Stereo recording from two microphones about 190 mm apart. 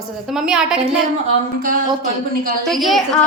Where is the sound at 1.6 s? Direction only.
45° right (ahead or behind).